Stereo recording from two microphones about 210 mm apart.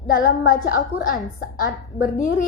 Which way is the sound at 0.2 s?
40° left (ahead or behind).